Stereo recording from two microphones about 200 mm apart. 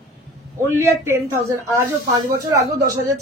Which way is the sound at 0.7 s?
15° right (ahead or behind).